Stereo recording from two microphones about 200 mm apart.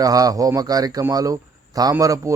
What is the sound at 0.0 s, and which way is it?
Speech, 20° right (ahead or behind).